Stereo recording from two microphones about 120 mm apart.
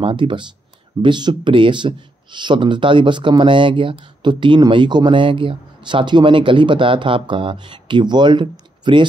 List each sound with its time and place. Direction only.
0.0 s speech: 45° right (ahead or behind)